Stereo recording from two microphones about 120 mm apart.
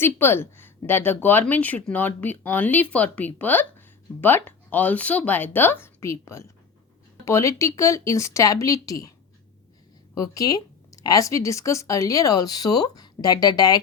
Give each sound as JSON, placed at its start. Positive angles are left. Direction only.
{"t": 0.0, "sound": "speech", "side_deg": 20}
{"t": 10.2, "sound": "speech", "side_deg": 30}